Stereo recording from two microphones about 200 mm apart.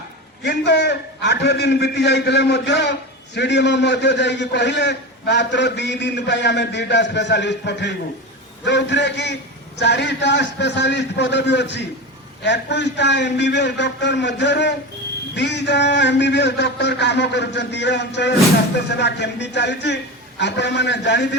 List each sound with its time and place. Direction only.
0.4 s a man's voice: 60° left (ahead or behind)